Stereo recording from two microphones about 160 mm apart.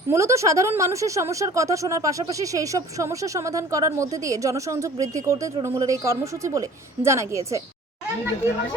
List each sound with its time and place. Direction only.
0.1 s speech: 20° right (ahead or behind)